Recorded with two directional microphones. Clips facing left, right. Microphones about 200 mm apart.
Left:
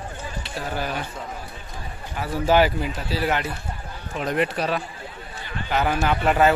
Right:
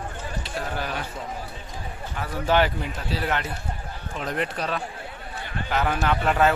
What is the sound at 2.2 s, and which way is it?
A man's voice, 5° left (ahead or behind).